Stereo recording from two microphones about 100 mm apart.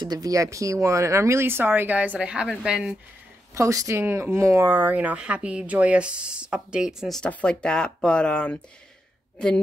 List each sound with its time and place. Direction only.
0.0 s speech: 40° right (ahead or behind); by 3.0 s 10° right (ahead or behind)
3.5 s speech: 30° right (ahead or behind); by 7.2 s 5° right (ahead or behind)
7.2 s speech: 10° left (ahead or behind)